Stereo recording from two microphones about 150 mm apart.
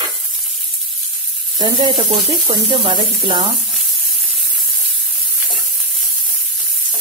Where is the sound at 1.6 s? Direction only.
30° right (ahead or behind).